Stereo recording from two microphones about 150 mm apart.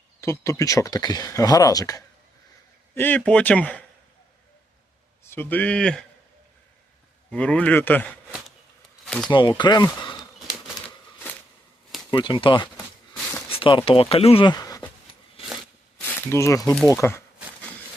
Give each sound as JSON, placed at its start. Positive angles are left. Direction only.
{"t": 0.2, "sound": "speech", "side_deg": 20}
{"t": 2.9, "sound": "speech", "side_deg": 10}
{"t": 5.2, "sound": "speech", "side_deg": 15}
{"t": 7.3, "sound": "speech", "side_deg": 5}
{"t": 9.0, "sound": "a sound", "side_deg": 5}
{"t": 9.3, "sound": "speech", "side_deg": 30}
{"t": 12.1, "sound": "speech", "side_deg": 35}
{"t": 16.0, "sound": "a sound", "side_deg": 10}